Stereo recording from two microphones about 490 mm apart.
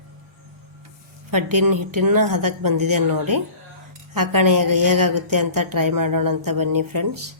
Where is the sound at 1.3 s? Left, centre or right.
Right.